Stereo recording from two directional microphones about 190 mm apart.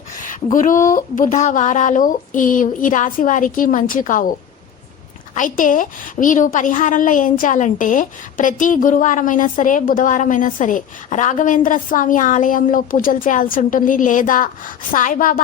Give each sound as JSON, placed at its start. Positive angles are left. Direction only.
{"t": 0.5, "sound": "a woman's voice", "side_deg": 45}
{"t": 5.3, "sound": "a woman's voice", "side_deg": 45}